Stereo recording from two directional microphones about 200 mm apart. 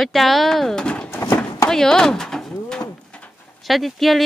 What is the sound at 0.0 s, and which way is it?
Speech, centre (ahead or behind).